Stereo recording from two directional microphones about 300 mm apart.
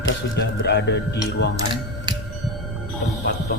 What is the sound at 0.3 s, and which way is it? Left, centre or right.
Speech, left.